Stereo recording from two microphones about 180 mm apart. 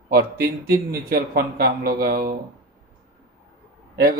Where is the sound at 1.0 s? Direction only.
55° right (ahead or behind).